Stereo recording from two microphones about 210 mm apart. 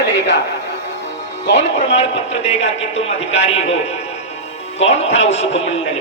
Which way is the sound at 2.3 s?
30° left (ahead or behind).